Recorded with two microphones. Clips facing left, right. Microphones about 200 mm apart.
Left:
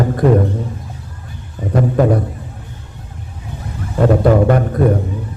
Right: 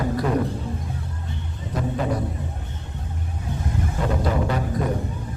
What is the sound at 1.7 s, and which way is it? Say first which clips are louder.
Speech: left 11 dB; 60° left (ahead or behind).